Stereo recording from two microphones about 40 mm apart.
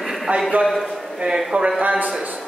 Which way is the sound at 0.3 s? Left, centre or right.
Right.